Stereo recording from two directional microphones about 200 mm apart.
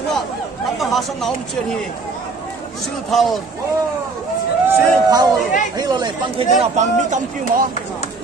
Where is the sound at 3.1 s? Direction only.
Centre (ahead or behind).